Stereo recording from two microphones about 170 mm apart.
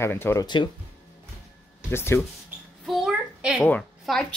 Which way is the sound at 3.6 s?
5° left (ahead or behind).